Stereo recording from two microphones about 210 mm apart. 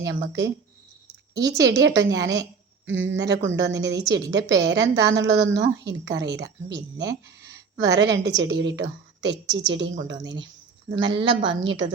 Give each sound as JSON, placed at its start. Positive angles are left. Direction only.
{"t": 0.0, "sound": "a woman's voice", "side_deg": -55}
{"t": 11.2, "sound": "a woman's voice", "side_deg": -25}
{"t": 11.6, "sound": "a woman's voice", "side_deg": -60}